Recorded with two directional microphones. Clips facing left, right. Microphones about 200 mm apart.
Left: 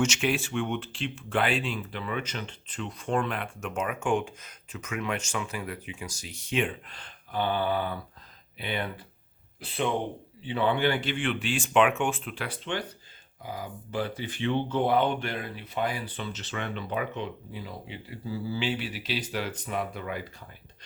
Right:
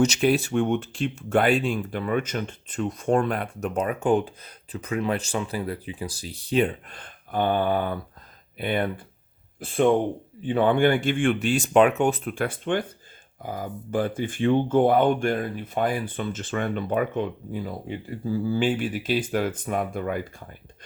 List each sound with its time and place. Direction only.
0.0 s speech: 35° right (ahead or behind)